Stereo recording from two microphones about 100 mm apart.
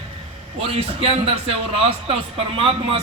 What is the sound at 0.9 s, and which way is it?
A man's voice, 75° right (ahead or behind).